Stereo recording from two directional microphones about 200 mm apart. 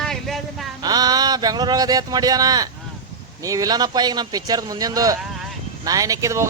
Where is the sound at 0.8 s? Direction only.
20° right (ahead or behind).